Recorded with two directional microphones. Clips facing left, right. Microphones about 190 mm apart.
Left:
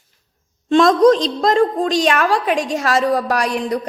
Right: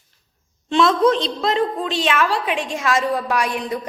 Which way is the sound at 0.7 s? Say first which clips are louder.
Left 5 dB; 45° left (ahead or behind).